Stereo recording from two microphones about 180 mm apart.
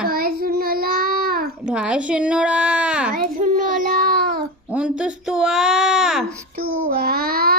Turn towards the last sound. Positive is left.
turn(degrees=-55)  # may be behind; listen again after turning